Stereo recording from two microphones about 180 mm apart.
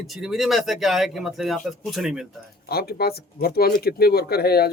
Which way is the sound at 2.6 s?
60° left (ahead or behind).